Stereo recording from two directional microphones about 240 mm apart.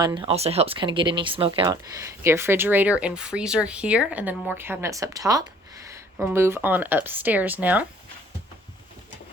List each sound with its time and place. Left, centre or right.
0.0 s speech: centre